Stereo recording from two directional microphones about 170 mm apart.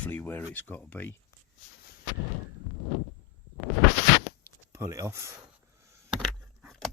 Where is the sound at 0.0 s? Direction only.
10° left (ahead or behind).